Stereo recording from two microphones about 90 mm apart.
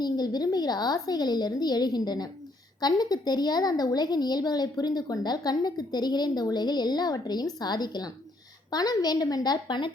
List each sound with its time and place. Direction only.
0.0 s a woman's voice: 50° left (ahead or behind)